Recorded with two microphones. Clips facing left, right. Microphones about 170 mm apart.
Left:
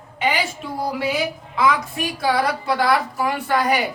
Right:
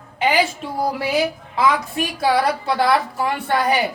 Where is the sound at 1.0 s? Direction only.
30° right (ahead or behind).